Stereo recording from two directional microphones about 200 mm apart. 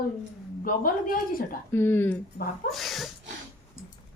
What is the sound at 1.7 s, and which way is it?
Speech, 10° left (ahead or behind).